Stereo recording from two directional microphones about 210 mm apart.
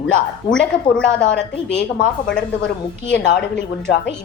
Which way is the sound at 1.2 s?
55° left (ahead or behind).